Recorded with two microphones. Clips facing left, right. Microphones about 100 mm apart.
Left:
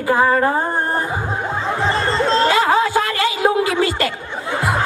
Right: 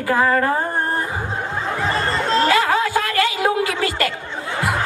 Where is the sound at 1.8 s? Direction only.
30° left (ahead or behind).